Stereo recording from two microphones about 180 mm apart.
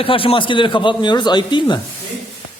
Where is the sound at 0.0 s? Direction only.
30° left (ahead or behind).